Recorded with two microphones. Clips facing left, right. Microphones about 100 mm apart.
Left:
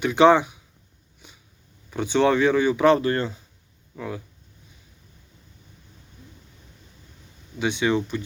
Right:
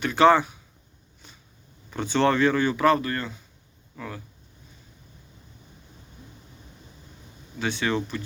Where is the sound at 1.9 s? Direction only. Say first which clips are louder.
Left 2 dB; 15° left (ahead or behind).